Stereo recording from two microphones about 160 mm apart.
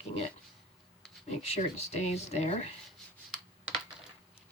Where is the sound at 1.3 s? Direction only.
40° left (ahead or behind).